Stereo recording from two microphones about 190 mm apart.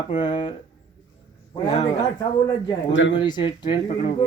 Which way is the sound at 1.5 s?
20° left (ahead or behind).